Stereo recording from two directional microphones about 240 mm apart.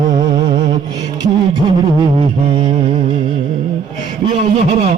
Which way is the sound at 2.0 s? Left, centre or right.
Right.